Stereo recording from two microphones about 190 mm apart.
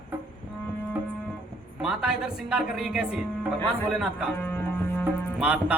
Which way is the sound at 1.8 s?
5° right (ahead or behind).